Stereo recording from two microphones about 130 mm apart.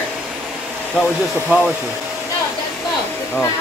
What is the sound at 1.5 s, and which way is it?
Speech, 10° right (ahead or behind).